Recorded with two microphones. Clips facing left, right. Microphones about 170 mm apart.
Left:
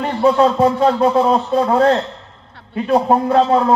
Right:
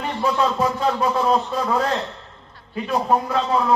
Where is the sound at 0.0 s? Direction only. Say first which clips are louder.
Left 8 dB; 30° left (ahead or behind).